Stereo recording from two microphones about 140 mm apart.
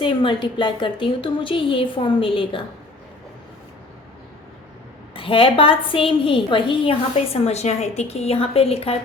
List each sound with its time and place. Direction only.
0.0 s a woman's voice: 35° left (ahead or behind)
5.1 s a woman's voice: 40° left (ahead or behind)
7.3 s a woman's voice: 50° left (ahead or behind)